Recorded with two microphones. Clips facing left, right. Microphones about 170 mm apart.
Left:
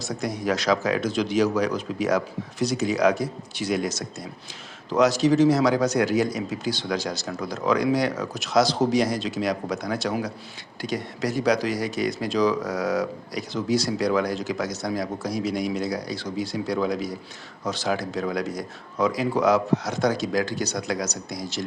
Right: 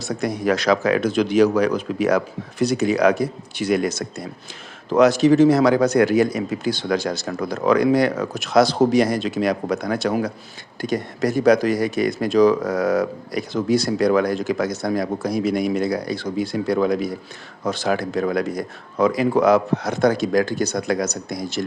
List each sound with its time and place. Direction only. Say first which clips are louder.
0.0 s speech: right 5 dB; 60° right (ahead or behind)